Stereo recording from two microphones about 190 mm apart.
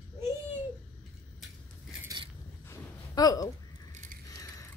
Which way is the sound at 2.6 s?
20° left (ahead or behind).